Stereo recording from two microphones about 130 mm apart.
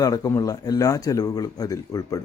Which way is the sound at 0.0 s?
30° left (ahead or behind).